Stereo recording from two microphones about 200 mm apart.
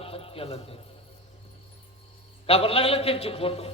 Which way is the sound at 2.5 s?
30° left (ahead or behind).